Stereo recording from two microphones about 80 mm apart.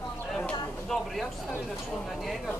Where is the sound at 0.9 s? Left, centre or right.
Centre.